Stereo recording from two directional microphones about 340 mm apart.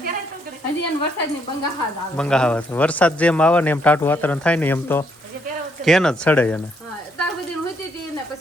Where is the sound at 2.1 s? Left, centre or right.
Centre.